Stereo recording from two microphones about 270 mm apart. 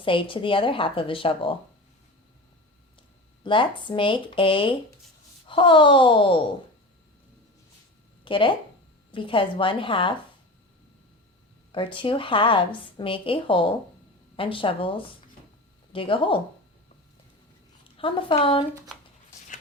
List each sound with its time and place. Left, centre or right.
0.0 s a woman's voice: centre
3.4 s a woman's voice: centre
8.2 s a woman's voice: centre
11.7 s a woman's voice: centre
17.8 s speech: centre